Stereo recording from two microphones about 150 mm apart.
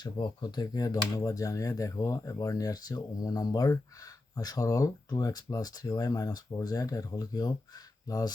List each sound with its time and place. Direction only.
0.0 s speech: 30° left (ahead or behind)